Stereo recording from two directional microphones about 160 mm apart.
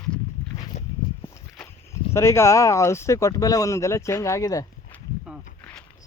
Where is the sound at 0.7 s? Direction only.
45° left (ahead or behind).